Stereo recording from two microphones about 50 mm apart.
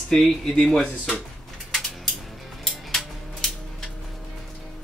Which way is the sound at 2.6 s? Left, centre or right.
Centre.